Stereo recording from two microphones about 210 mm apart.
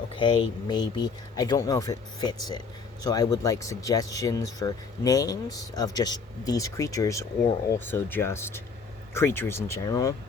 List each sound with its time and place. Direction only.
0.2 s speech: 20° left (ahead or behind)